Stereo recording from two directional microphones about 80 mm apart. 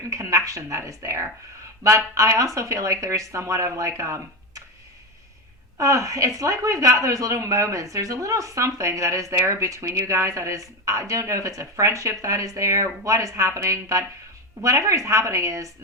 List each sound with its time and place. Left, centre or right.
0.1 s a woman's voice: right
5.7 s a woman's voice: right